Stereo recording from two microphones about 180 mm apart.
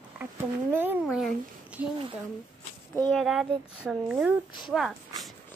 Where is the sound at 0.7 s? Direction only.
10° right (ahead or behind).